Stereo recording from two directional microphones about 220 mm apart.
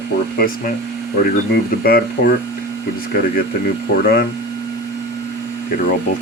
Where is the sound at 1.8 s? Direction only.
45° left (ahead or behind).